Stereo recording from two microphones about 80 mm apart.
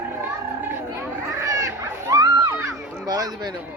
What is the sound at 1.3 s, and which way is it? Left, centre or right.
Crowd, right.